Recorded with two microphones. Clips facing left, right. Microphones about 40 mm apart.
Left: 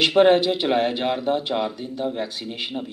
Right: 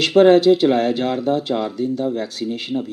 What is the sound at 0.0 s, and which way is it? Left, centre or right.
Speech, left.